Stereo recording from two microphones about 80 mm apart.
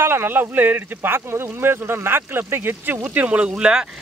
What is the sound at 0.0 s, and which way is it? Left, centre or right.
Speech, right.